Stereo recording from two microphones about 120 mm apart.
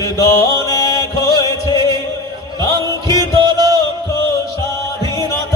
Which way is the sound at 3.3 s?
35° right (ahead or behind).